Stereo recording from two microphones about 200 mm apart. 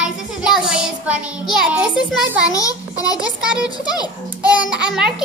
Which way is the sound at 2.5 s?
15° left (ahead or behind).